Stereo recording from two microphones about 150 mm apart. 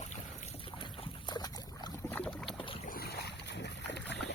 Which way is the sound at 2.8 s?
80° left.